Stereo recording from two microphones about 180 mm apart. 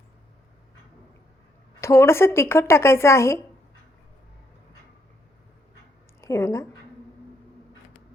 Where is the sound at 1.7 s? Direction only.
15° left (ahead or behind).